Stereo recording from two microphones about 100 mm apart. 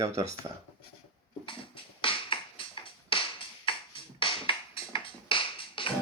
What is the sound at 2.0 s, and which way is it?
Music, 60° left (ahead or behind).